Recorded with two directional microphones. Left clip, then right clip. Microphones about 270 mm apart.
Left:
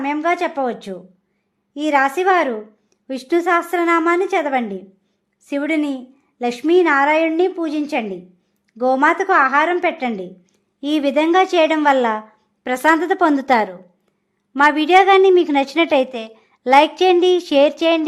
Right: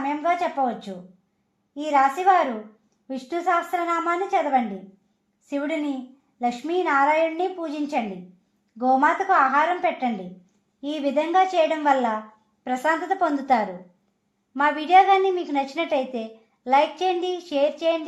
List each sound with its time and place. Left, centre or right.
0.0 s a woman's voice: left